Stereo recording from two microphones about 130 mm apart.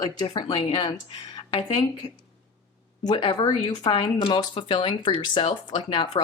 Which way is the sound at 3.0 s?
40° left (ahead or behind).